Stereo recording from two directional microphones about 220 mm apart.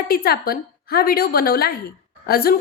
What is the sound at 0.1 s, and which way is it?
A woman's voice, 45° left (ahead or behind).